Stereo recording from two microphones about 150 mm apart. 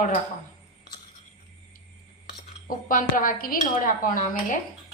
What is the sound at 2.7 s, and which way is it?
A woman's voice, 65° left (ahead or behind).